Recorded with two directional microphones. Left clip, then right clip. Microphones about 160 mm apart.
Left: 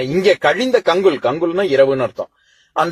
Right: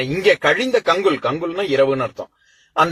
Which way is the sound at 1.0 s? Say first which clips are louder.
Left 4 dB; 40° left (ahead or behind).